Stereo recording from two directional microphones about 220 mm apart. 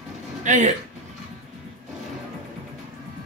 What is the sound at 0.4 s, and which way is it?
Speech, 35° right (ahead or behind).